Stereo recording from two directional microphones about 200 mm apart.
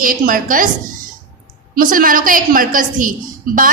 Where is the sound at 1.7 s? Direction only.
45° right (ahead or behind).